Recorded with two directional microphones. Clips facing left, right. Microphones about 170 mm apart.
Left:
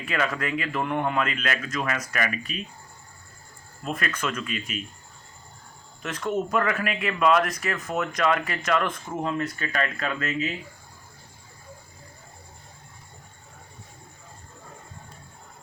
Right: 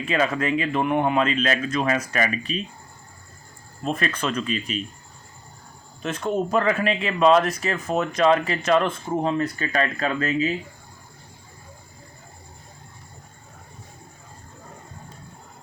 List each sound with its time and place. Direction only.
0.0 s speech: 25° right (ahead or behind)
3.8 s speech: 30° right (ahead or behind)
6.0 s speech: 25° right (ahead or behind)